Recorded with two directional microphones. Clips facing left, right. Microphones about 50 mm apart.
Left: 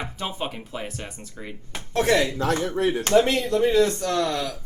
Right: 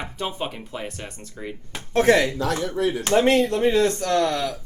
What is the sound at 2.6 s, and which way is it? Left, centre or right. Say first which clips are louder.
Speech: even; left.